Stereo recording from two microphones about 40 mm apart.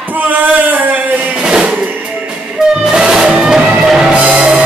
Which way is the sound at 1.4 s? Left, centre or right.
Right.